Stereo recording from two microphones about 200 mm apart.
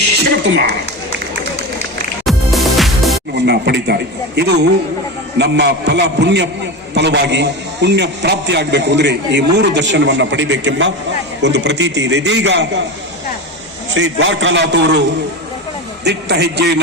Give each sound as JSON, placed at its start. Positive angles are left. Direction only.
{"t": 2.2, "sound": "music", "side_deg": 0}
{"t": 3.3, "sound": "a man's voice", "side_deg": -55}
{"t": 13.9, "sound": "a man's voice", "side_deg": -70}
{"t": 16.0, "sound": "a man's voice", "side_deg": -55}